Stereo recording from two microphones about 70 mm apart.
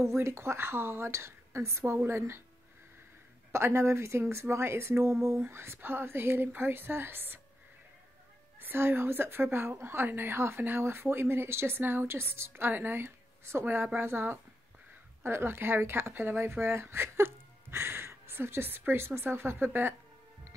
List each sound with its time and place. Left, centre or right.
0.0 s a woman's voice: right
3.5 s a woman's voice: right
8.5 s a woman's voice: right